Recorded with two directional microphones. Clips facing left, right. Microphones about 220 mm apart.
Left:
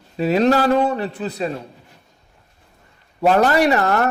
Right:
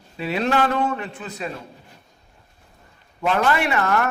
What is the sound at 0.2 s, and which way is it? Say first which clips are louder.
A man's voice: left 6 dB; 40° left (ahead or behind).